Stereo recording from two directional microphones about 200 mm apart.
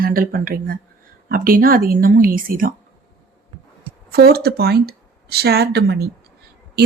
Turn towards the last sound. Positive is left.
turn(degrees=-55)  # may be behind; listen again after turning